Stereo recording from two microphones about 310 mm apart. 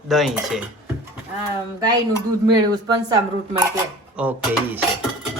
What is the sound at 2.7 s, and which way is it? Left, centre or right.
Speech, centre.